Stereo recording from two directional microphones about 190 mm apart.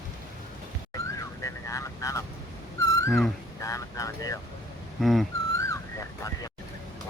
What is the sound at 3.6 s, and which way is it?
Vehicle, 15° left (ahead or behind).